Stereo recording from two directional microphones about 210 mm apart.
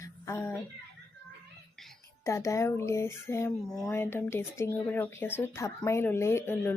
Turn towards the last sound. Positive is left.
turn(degrees=10)  # may be behind; listen again after turning